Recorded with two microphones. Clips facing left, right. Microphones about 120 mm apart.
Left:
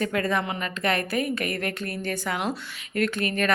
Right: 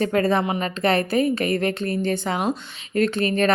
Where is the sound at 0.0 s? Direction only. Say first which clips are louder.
Right 5 dB; 30° right (ahead or behind).